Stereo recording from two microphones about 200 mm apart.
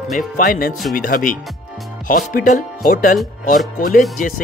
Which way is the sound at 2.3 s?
45° left (ahead or behind).